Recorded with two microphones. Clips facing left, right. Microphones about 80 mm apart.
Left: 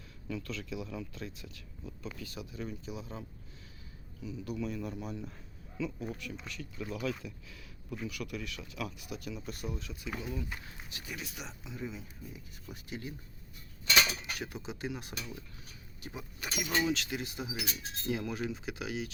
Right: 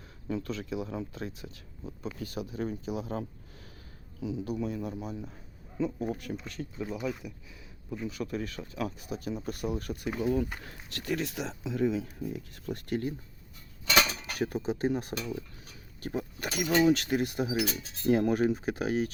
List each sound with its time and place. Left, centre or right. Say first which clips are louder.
0.3 s speech: right 5 dB; right
4.2 s speech: right 8 dB; right
4.4 s speech: even; right
4.9 s speech: right 2 dB; centre
5.7 s speech: right 6 dB; right
6.7 s speech: right 2 dB; right
8.0 s speech: right 6 dB; right
10.9 s speech: right 12 dB; right
13.9 s cutlery: right 3 dB; right
16.0 s speech: right 10 dB; right
17.7 s speech: right 7 dB; right
18.1 s speech: right 10 dB; right